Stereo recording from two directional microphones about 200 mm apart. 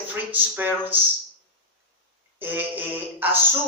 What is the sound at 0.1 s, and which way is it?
Speech, 10° right (ahead or behind).